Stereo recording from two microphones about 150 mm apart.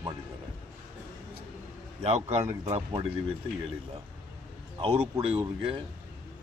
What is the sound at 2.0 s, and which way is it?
A man's voice, 45° right (ahead or behind).